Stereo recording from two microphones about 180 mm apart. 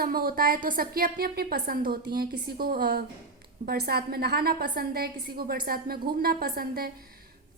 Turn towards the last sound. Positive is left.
turn(degrees=-55)  # may be behind; listen again after turning